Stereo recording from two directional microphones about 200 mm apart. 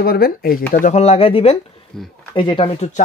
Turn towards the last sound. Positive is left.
turn(degrees=30)  # may be behind; listen again after turning